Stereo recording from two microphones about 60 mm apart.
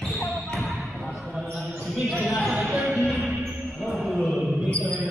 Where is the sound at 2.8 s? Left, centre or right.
Centre.